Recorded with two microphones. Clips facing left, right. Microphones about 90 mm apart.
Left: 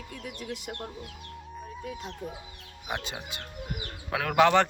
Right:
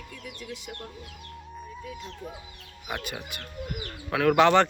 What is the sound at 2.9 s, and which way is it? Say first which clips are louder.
Speech: even; 20° left (ahead or behind).